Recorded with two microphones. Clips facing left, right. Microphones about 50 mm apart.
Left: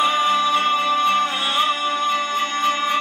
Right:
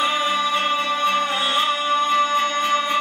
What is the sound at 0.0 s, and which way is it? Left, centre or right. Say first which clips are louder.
Music: left 3 dB; centre.